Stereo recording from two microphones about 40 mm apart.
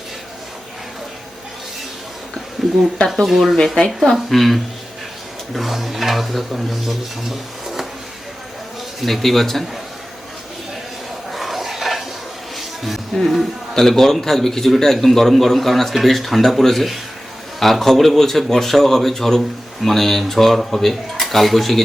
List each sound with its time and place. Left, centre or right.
3.2 s speech: centre
3.8 s speech: left
4.1 s speech: centre
9.0 s speech: centre
11.3 s a sound: centre
12.5 s music: centre
13.7 s a man's voice: centre